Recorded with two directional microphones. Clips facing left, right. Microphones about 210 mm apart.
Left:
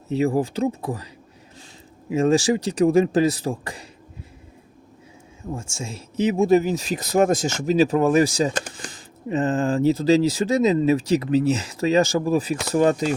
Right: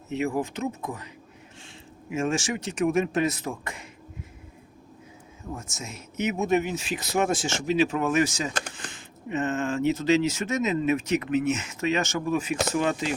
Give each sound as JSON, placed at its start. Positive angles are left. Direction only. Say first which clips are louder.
{"t": 0.1, "sound": "speech", "louder": "left 6 dB", "side_deg": 35}
{"t": 5.5, "sound": "speech", "louder": "left 5 dB", "side_deg": 30}